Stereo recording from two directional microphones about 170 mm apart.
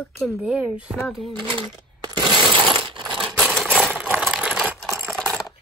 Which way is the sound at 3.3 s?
Centre (ahead or behind).